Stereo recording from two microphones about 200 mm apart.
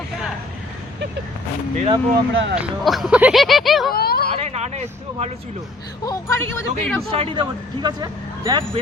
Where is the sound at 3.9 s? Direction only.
50° left (ahead or behind).